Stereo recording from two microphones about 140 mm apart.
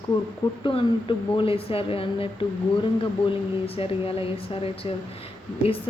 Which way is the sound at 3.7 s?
40° left (ahead or behind).